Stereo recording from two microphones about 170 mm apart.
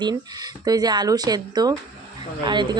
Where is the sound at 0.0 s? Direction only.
25° right (ahead or behind).